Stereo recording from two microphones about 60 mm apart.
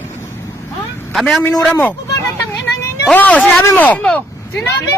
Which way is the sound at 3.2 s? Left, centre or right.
Left.